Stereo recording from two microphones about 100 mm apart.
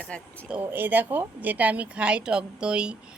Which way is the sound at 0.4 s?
15° right (ahead or behind).